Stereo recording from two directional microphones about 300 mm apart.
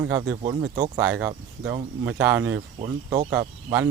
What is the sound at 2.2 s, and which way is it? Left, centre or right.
Speech, centre.